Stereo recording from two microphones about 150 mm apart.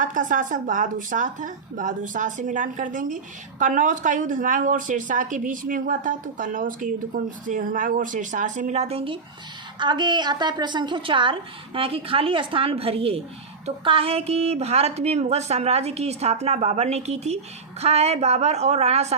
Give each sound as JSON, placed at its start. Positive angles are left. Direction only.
{"t": 0.0, "sound": "a woman's voice", "side_deg": -60}